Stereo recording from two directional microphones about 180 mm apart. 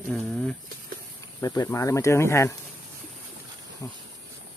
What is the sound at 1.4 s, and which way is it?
Speech, 20° left (ahead or behind).